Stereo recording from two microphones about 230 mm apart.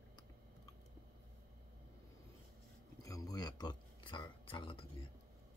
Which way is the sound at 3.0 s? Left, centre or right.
Centre.